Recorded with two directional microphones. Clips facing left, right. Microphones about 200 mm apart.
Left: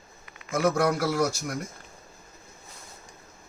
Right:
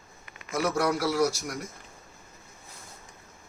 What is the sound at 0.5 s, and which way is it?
A man's voice, 50° left (ahead or behind).